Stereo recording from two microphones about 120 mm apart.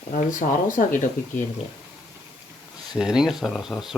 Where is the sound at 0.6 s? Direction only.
90° left.